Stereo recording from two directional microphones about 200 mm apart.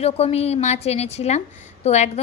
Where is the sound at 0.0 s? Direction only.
30° left (ahead or behind).